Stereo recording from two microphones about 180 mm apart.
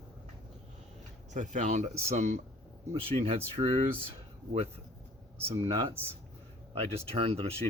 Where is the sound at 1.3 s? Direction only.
45° right (ahead or behind).